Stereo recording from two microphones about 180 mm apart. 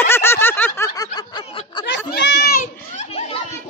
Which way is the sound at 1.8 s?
70° left (ahead or behind).